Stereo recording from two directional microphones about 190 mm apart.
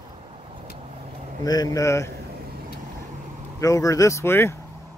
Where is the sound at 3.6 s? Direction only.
15° left (ahead or behind).